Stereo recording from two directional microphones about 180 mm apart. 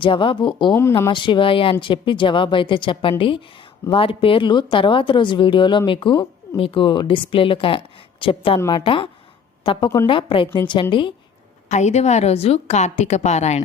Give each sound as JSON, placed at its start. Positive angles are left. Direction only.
{"t": 0.0, "sound": "speech", "side_deg": 30}
{"t": 0.7, "sound": "speech", "side_deg": 15}
{"t": 11.7, "sound": "a woman's voice", "side_deg": 40}